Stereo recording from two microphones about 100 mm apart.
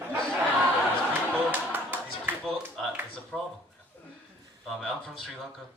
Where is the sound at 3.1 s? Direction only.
5° left (ahead or behind).